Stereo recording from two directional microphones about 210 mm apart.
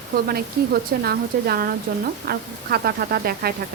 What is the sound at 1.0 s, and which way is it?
Speech, 45° right (ahead or behind).